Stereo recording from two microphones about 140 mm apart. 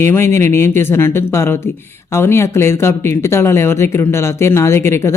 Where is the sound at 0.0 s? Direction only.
20° left (ahead or behind).